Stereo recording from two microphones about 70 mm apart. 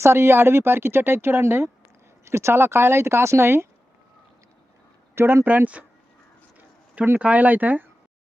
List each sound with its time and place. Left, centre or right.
0.0 s speech: right
5.1 s speech: right
6.6 s a sound: right
7.2 s speech: right